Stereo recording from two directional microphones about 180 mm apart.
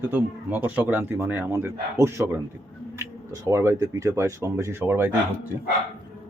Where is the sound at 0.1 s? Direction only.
10° right (ahead or behind).